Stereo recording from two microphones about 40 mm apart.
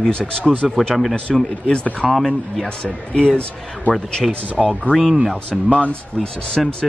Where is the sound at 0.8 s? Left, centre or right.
Centre; by 4.3 s left.